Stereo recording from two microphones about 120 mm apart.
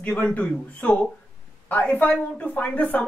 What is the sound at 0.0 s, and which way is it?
Speech, 10° left (ahead or behind).